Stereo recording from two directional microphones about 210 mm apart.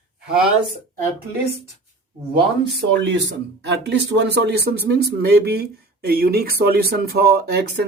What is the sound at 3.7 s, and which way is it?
Speech, 55° right (ahead or behind).